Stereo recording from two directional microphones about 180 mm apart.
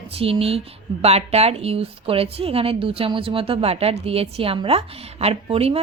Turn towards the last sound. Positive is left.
turn(degrees=-35)  # may be behind; listen again after turning